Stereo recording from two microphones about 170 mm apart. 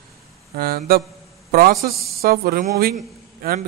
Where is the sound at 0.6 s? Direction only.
60° right (ahead or behind).